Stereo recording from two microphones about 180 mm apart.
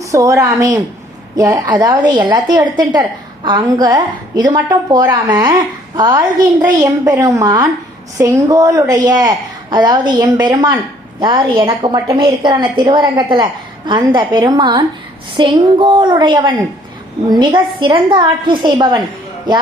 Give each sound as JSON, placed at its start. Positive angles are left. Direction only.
{"t": 0.0, "sound": "a woman's voice", "side_deg": -15}